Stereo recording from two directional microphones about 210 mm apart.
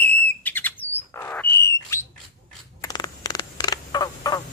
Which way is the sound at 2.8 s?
20° left (ahead or behind).